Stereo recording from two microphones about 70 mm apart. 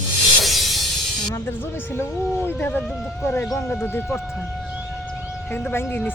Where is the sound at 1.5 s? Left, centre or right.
Left.